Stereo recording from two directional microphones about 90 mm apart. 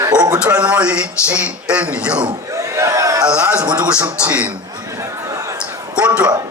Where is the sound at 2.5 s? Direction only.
35° right (ahead or behind).